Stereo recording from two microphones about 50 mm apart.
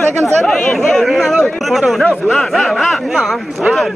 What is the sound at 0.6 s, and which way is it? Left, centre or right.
Speech, centre.